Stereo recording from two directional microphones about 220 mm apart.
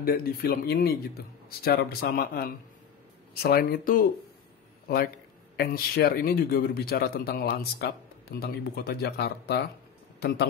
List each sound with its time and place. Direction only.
0.0 s a man's voice: 40° left (ahead or behind)